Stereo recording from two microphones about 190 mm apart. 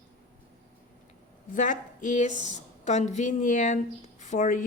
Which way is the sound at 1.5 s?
40° left (ahead or behind).